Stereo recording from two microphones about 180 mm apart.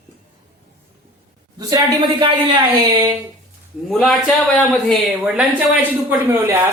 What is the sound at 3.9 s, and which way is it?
A man's voice, centre (ahead or behind).